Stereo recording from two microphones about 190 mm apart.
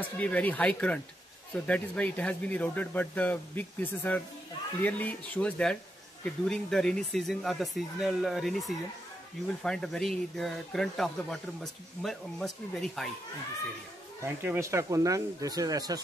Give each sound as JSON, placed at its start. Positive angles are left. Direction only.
{"t": 0.2, "sound": "speech", "side_deg": 10}
{"t": 14.2, "sound": "speech", "side_deg": -15}